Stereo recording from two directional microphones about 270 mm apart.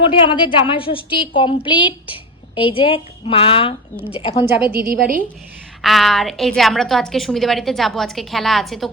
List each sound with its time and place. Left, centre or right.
0.0 s a woman's voice: centre
4.7 s a woman's voice: right
5.8 s a woman's voice: centre